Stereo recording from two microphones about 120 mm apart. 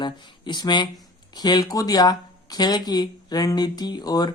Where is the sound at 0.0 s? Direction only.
40° left (ahead or behind).